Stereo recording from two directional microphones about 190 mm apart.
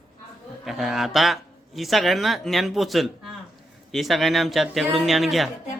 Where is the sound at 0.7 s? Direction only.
Centre (ahead or behind).